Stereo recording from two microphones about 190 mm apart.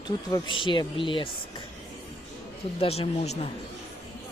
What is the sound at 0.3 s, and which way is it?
Speech, 25° left (ahead or behind).